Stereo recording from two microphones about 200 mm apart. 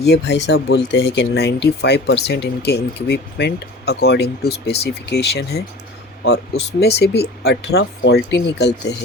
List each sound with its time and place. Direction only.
0.0 s speech: 60° left (ahead or behind)